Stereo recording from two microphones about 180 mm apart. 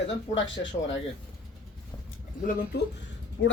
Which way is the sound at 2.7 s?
65° left (ahead or behind).